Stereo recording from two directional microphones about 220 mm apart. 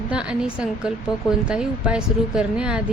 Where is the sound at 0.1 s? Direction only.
5° right (ahead or behind).